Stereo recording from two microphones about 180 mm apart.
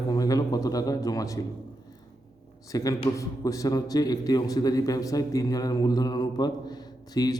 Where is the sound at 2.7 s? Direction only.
20° left (ahead or behind).